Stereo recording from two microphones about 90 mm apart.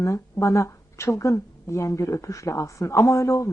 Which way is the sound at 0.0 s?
35° left (ahead or behind).